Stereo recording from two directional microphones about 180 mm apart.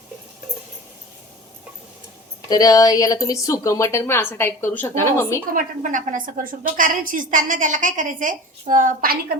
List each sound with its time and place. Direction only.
2.5 s a woman's voice: 20° left (ahead or behind)
5.5 s a woman's voice: 50° right (ahead or behind)